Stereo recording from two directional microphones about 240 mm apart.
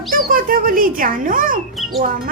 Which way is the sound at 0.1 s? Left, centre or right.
Right.